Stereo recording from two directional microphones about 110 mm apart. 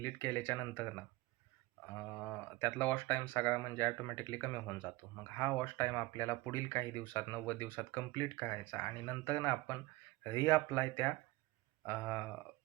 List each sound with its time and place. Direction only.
0.0 s speech: 20° left (ahead or behind)